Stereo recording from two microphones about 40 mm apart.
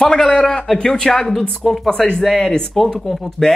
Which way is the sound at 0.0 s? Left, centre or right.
Centre.